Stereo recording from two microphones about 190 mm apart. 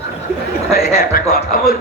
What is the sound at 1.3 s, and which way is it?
Speech, 55° left (ahead or behind).